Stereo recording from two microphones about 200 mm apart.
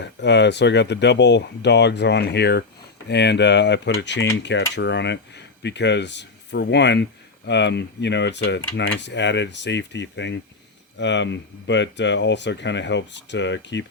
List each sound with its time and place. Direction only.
0.0 s speech: 60° left (ahead or behind)